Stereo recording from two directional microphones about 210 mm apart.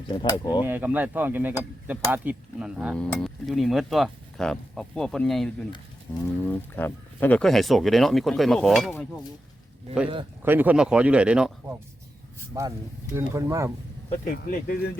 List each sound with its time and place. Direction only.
0.1 s speech: 20° left (ahead or behind)
0.6 s cutlery: 10° right (ahead or behind)
1.9 s speech: 10° right (ahead or behind)
6.1 s a sound: 5° left (ahead or behind)
6.4 s speech: 10° left (ahead or behind)
10.4 s speech: 10° right (ahead or behind)
13.1 s cutlery: 15° right (ahead or behind)
14.1 s speech: 45° left (ahead or behind)